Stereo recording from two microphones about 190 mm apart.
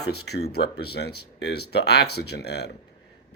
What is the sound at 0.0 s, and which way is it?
A man's voice, 60° left (ahead or behind).